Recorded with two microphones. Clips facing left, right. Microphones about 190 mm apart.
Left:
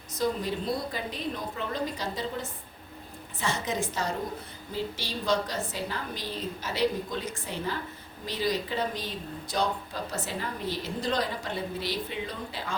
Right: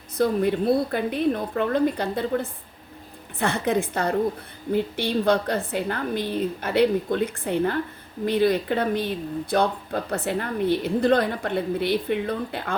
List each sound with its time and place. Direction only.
0.2 s speech: 60° right (ahead or behind)